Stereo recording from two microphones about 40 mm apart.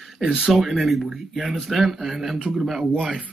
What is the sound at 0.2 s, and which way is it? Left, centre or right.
Speech, right.